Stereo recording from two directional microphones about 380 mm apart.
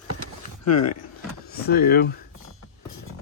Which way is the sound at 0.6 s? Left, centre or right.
Left.